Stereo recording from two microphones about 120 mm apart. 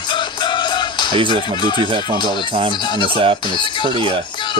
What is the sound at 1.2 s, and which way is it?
Speech, 45° right (ahead or behind).